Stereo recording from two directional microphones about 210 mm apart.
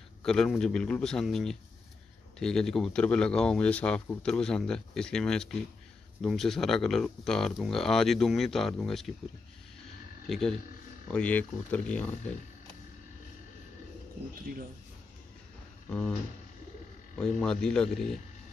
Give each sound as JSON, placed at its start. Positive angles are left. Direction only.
{"t": 0.2, "sound": "speech", "side_deg": 0}
{"t": 10.2, "sound": "speech", "side_deg": 0}
{"t": 14.4, "sound": "speech", "side_deg": -45}
{"t": 15.9, "sound": "speech", "side_deg": 5}
{"t": 17.2, "sound": "speech", "side_deg": 5}